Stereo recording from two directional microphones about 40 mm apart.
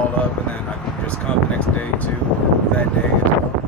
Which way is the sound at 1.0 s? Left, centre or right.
Left.